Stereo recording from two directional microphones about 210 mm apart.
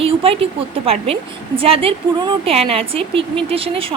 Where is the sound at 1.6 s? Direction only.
25° right (ahead or behind).